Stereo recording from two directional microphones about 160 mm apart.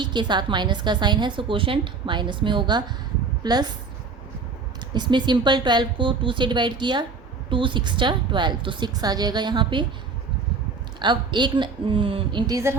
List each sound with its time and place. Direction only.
0.0 s a woman's voice: 30° right (ahead or behind)
4.9 s a woman's voice: 30° right (ahead or behind)
11.0 s a woman's voice: 30° right (ahead or behind)